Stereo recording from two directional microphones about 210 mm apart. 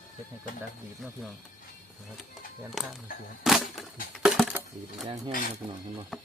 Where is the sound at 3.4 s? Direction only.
Centre (ahead or behind).